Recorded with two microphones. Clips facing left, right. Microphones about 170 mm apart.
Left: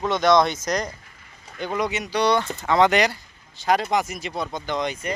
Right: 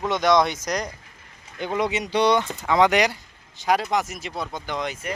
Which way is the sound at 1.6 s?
25° right (ahead or behind).